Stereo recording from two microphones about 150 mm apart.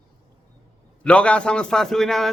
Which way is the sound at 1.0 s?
5° left (ahead or behind).